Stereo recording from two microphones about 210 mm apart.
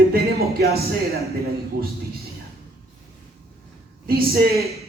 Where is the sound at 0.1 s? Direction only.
45° right (ahead or behind).